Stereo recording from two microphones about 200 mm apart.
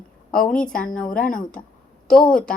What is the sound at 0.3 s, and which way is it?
A woman's voice, 5° left (ahead or behind).